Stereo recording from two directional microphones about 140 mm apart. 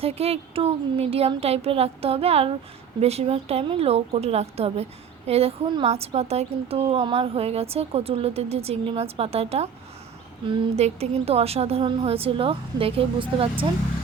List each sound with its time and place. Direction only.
0.0 s a woman's voice: 45° right (ahead or behind)
10.8 s a woman's voice: 50° right (ahead or behind)